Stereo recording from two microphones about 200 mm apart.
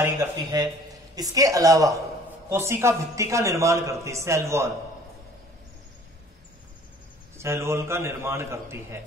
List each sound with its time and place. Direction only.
0.0 s a man's voice: 15° right (ahead or behind)
7.3 s a man's voice: 15° right (ahead or behind)